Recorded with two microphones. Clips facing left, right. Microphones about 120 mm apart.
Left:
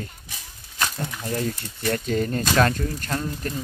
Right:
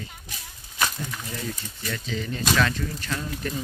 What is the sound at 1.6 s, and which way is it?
Speech, 65° left (ahead or behind).